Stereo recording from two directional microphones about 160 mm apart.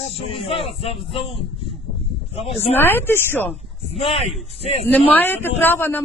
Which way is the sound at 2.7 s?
15° left (ahead or behind).